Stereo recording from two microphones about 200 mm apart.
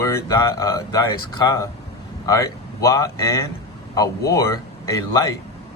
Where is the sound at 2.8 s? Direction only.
15° left (ahead or behind).